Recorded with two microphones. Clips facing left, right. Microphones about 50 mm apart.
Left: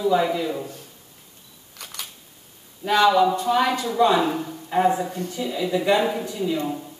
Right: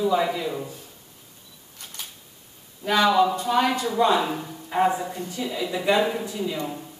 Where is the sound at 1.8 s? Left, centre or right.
Left.